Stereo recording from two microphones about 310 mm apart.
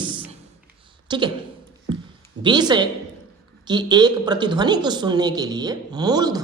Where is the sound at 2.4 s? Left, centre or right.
Centre.